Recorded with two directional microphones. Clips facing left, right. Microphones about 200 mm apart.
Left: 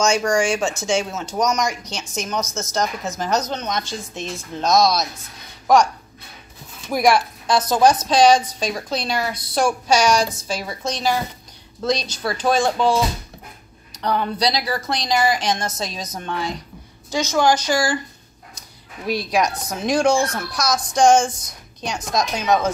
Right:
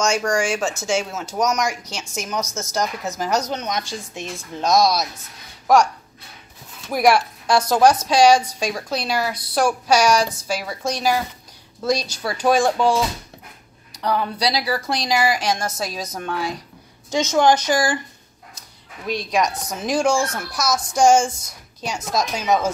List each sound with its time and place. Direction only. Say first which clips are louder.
0.0 s speech: left 2 dB; centre (ahead or behind)
6.9 s speech: even; 5° right (ahead or behind)
13.9 s speech: left 1 dB; 5° right (ahead or behind)
17.1 s speech: right 1 dB; 20° right (ahead or behind)
19.0 s speech: left 1 dB; 5° left (ahead or behind)